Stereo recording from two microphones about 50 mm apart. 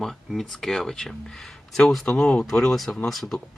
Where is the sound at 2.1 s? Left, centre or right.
Centre.